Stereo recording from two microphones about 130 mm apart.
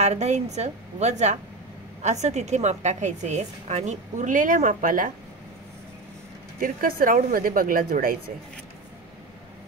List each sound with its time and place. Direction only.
0.0 s a woman's voice: 60° right (ahead or behind); by 5.1 s 90° right
6.6 s a woman's voice: 90° right